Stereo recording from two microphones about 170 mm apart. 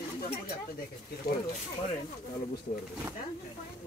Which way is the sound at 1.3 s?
65° left (ahead or behind).